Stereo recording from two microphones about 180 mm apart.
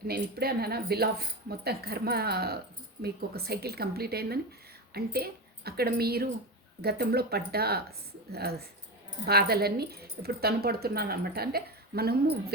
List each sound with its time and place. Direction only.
0.1 s a woman's voice: 60° right (ahead or behind)